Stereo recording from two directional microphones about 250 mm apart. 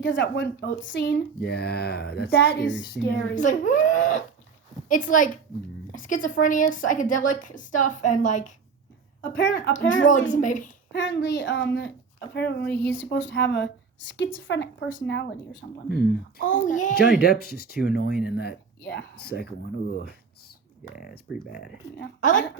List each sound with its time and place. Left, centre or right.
0.0 s a woman's voice: left
9.3 s a woman's voice: left
10.4 s a woman's voice: left
10.9 s a woman's voice: left
21.5 s a woman's voice: left